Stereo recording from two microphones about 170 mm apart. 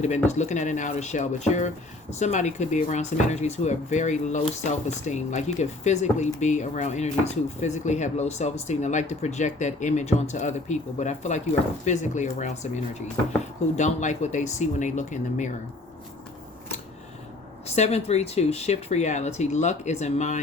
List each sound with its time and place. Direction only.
0.3 s speech: 45° left (ahead or behind)
17.7 s speech: 40° left (ahead or behind)